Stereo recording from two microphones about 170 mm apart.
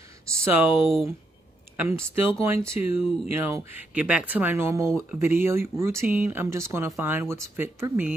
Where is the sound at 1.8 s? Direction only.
15° right (ahead or behind).